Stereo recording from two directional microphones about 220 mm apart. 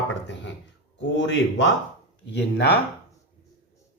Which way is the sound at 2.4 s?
50° left (ahead or behind).